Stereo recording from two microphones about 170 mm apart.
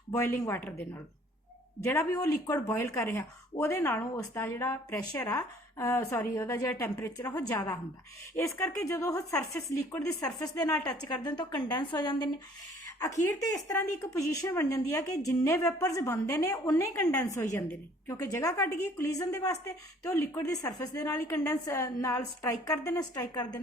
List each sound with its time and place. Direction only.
1.8 s a woman's voice: 15° left (ahead or behind)